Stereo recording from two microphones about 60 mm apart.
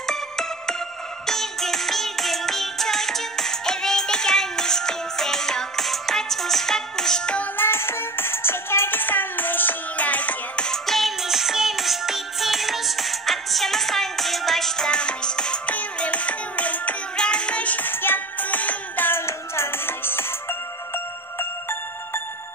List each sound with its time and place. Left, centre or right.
0.0 s music: centre
7.5 s music: left
10.7 s music: centre; by 19.2 s left
19.2 s music: left